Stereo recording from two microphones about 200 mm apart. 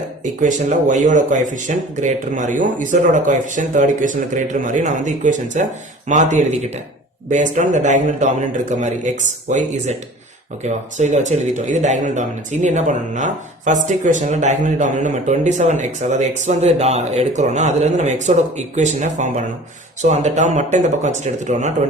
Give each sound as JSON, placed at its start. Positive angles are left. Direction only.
{"t": 0.4, "sound": "speech", "side_deg": -40}